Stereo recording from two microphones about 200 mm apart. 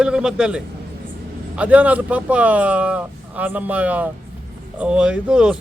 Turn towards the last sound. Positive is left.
turn(degrees=-5)  # may be behind; listen again after turning